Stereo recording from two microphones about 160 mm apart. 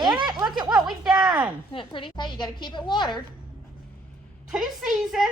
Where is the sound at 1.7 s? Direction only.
35° left (ahead or behind).